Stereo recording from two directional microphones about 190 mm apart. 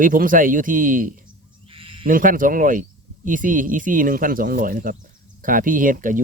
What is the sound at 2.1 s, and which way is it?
Speech, 45° right (ahead or behind).